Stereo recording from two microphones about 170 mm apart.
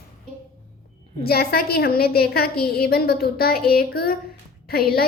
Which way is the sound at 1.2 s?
65° left (ahead or behind).